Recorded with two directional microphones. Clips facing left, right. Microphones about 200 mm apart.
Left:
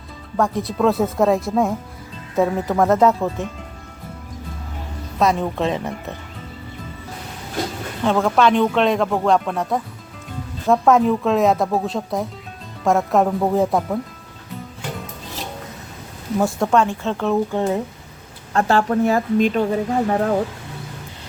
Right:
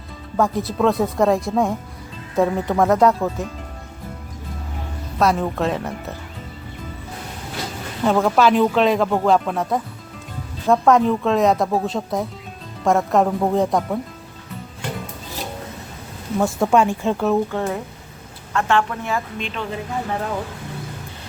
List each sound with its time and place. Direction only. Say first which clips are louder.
0.3 s speech: even; centre (ahead or behind)
5.2 s speech: even; centre (ahead or behind)
8.0 s speech: even; 5° right (ahead or behind)
16.7 s speech: right 2 dB; 10° right (ahead or behind)
17.5 s speech: left 3 dB; 20° left (ahead or behind)
18.5 s a woman's voice: left 3 dB; 35° left (ahead or behind)